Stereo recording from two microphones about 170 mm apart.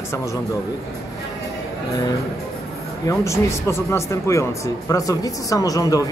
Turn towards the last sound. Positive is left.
turn(degrees=20)  # may be behind; listen again after turning